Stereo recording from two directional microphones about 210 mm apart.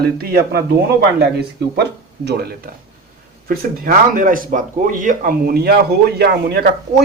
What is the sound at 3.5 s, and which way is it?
Speech, 40° right (ahead or behind).